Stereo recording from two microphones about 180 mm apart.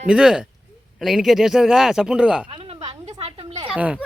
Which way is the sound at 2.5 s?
30° right (ahead or behind).